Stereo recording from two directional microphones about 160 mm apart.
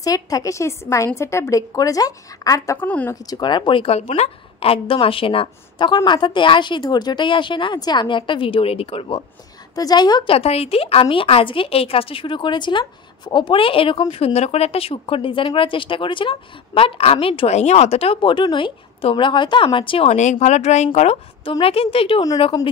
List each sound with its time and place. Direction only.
0.0 s a woman's voice: 20° left (ahead or behind)
3.3 s a woman's voice: 25° left (ahead or behind)
9.8 s a woman's voice: 25° left (ahead or behind)